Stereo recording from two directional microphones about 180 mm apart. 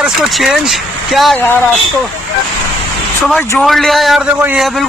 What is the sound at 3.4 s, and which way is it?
Speech, 5° left (ahead or behind).